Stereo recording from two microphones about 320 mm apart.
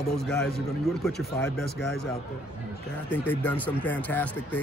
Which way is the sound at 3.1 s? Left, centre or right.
Centre.